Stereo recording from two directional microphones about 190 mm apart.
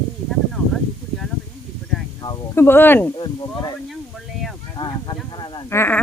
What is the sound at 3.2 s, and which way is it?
Speech, 20° left (ahead or behind).